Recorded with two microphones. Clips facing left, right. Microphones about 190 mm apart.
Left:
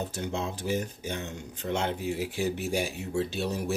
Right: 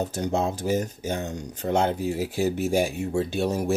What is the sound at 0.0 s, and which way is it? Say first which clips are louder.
Speech: right 7 dB; 40° right (ahead or behind).